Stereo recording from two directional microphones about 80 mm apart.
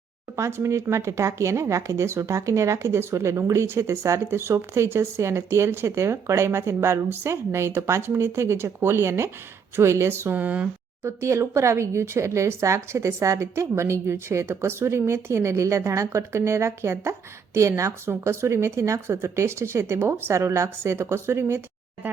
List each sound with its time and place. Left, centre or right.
0.3 s a woman's voice: right; by 10.7 s centre
11.0 s speech: right
22.0 s a woman's voice: centre